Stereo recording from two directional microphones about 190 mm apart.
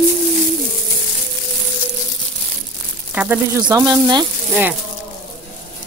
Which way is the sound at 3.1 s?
5° right (ahead or behind).